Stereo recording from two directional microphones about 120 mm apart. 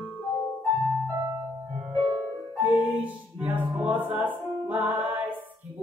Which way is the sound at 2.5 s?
15° right (ahead or behind).